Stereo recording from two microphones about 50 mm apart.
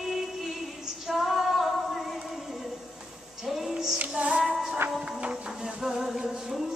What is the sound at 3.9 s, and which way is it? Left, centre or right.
Music, right.